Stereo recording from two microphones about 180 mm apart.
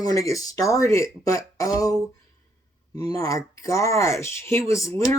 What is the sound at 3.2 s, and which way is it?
Speech, 20° left (ahead or behind).